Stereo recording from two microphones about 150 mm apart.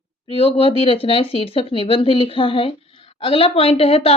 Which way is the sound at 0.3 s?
35° left (ahead or behind).